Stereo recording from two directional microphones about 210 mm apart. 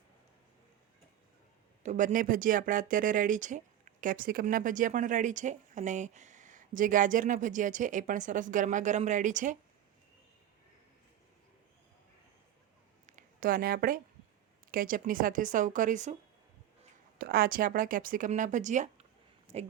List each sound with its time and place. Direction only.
1.8 s speech: 35° right (ahead or behind)
13.1 s a sound: 40° right (ahead or behind)
14.7 s speech: 40° right (ahead or behind)
17.2 s speech: 45° right (ahead or behind)